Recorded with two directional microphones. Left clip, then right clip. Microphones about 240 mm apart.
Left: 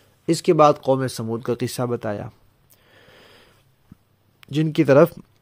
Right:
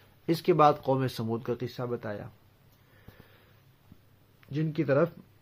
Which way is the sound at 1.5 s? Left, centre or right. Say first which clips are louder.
Left 9 dB; left.